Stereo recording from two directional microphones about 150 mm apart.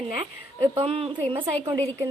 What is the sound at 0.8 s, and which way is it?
Speech, 40° right (ahead or behind).